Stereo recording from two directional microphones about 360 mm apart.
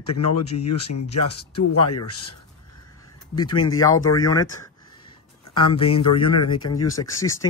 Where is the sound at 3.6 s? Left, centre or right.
Centre.